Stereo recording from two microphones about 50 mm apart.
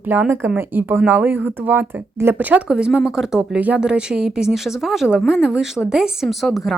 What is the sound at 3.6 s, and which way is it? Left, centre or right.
Speech, right.